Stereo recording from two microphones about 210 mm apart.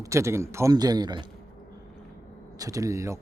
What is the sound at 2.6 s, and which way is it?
Speech, 15° right (ahead or behind).